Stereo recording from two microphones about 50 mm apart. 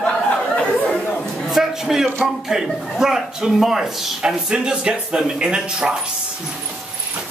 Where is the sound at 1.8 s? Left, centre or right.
Centre.